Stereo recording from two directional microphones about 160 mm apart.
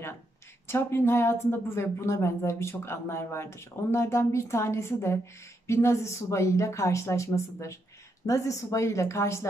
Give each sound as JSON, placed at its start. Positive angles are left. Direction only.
{"t": 0.7, "sound": "a woman's voice", "side_deg": 15}